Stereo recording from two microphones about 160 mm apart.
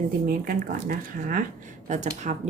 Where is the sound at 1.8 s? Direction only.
50° right (ahead or behind).